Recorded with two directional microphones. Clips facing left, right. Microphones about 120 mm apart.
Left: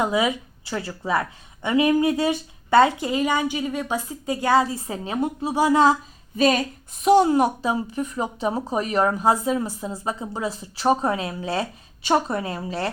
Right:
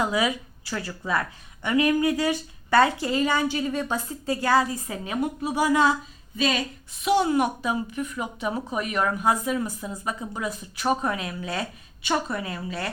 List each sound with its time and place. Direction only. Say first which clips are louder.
0.0 s a woman's voice: left 3 dB; 20° left (ahead or behind)